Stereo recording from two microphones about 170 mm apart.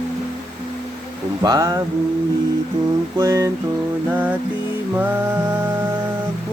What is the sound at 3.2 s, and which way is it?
Music, 15° right (ahead or behind).